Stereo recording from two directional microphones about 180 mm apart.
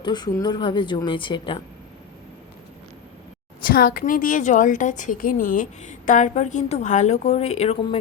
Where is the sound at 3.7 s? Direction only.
55° left (ahead or behind).